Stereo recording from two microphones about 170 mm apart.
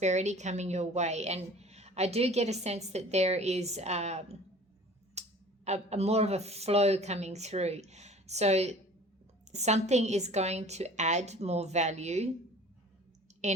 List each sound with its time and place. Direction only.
0.0 s a woman's voice: 40° right (ahead or behind)
5.2 s a sound: 40° right (ahead or behind)
5.6 s a woman's voice: 40° right (ahead or behind)
13.4 s a woman's voice: 45° right (ahead or behind)